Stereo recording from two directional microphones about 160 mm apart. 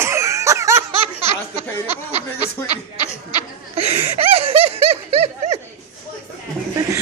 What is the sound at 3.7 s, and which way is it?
Snicker, 40° right (ahead or behind).